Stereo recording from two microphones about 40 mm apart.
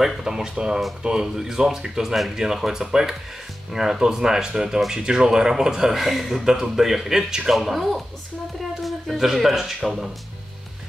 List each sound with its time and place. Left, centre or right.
0.0 s speech: centre
5.9 s speech: centre